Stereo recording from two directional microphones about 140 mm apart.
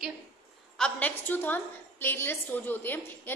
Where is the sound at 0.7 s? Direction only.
10° left (ahead or behind).